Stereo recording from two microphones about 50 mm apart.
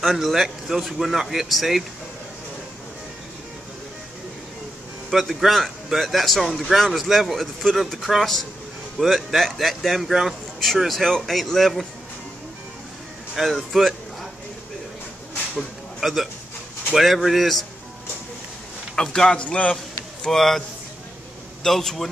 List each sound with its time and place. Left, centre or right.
0.1 s speech: centre
5.1 s speech: centre
13.3 s speech: centre
16.0 s a man's voice: centre
18.9 s speech: centre
19.4 s a man's voice: left
20.2 s speech: centre
21.6 s speech: centre